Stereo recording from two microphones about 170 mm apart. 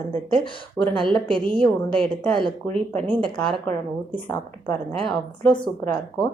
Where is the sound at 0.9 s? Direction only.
5° left (ahead or behind).